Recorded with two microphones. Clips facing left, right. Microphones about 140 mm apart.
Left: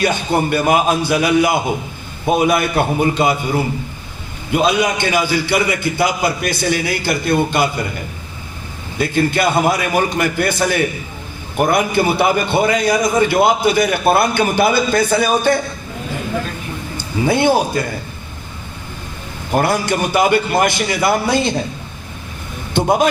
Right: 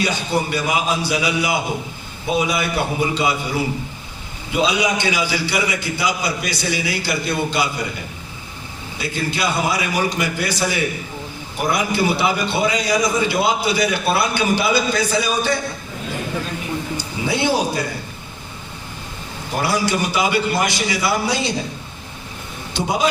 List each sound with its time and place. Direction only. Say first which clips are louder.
0.0 s a man's voice: left 4 dB; 55° left (ahead or behind)
9.0 s a man's voice: left 7 dB; 55° left (ahead or behind)
17.2 s a man's voice: left 5 dB; 50° left (ahead or behind)
19.5 s a man's voice: left 4 dB; 50° left (ahead or behind)
22.7 s a man's voice: left 7 dB; 50° left (ahead or behind)